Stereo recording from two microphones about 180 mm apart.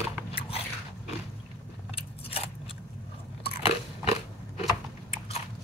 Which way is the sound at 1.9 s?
30° left (ahead or behind).